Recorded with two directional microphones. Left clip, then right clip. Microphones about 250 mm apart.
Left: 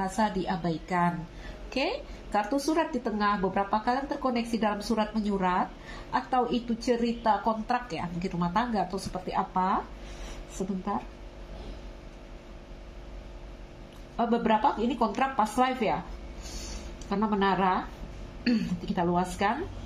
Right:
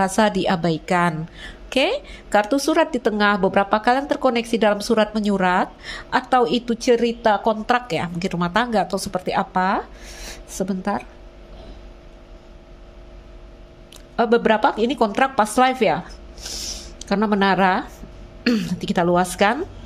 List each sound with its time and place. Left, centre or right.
0.0 s a woman's voice: right
14.1 s a woman's voice: right
17.0 s a woman's voice: right